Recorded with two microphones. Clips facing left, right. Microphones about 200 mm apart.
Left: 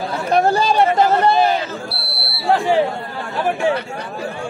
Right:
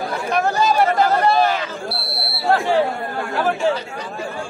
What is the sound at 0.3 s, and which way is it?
Speech, 30° left (ahead or behind).